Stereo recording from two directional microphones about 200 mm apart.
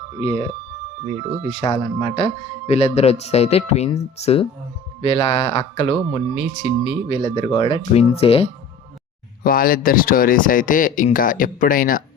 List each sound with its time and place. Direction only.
0.2 s speech: 30° left (ahead or behind)
9.4 s speech: 45° left (ahead or behind)